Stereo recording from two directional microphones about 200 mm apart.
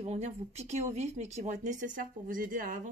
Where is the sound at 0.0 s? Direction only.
35° right (ahead or behind).